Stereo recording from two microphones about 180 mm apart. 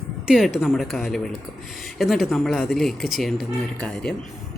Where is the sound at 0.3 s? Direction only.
Centre (ahead or behind).